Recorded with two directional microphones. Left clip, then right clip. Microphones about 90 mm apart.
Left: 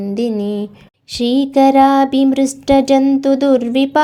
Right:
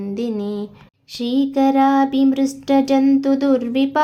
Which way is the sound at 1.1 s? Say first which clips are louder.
Left 6 dB; 55° left (ahead or behind).